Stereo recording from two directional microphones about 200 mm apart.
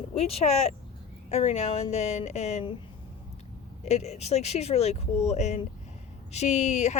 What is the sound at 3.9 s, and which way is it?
Speech, 35° left (ahead or behind).